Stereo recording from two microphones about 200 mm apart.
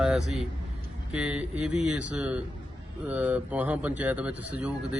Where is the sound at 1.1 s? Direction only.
5° right (ahead or behind).